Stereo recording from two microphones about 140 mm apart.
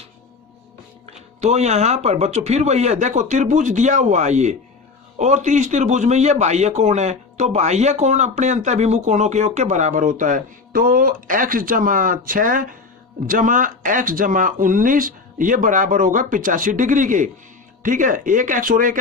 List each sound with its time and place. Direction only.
1.4 s a man's voice: 50° right (ahead or behind); by 18.9 s 75° right (ahead or behind)